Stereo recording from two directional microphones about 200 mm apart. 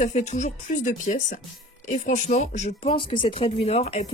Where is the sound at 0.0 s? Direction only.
35° left (ahead or behind).